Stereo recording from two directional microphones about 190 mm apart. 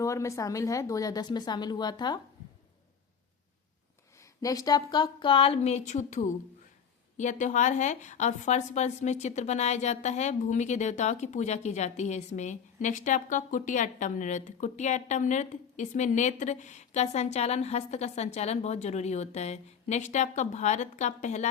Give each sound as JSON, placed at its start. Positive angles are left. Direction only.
{"t": 0.0, "sound": "speech", "side_deg": 15}
{"t": 4.4, "sound": "a woman's voice", "side_deg": 20}